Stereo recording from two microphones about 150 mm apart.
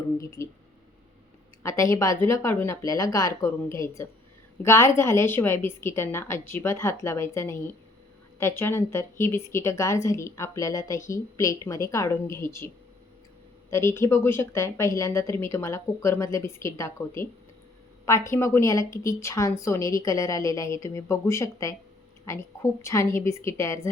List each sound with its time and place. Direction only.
0.2 s speech: 20° left (ahead or behind)
1.6 s a woman's voice: 20° left (ahead or behind)